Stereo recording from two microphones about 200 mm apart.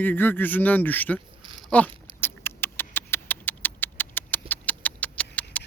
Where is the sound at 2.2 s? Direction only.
10° left (ahead or behind).